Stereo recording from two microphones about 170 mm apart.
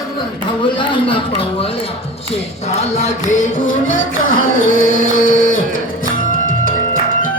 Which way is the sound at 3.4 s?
50° left (ahead or behind).